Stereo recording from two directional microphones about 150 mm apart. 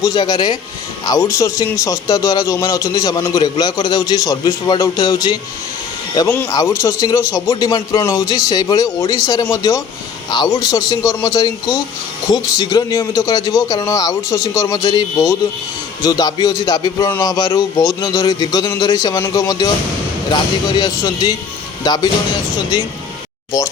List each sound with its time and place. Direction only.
0.0 s a man's voice: 25° left (ahead or behind)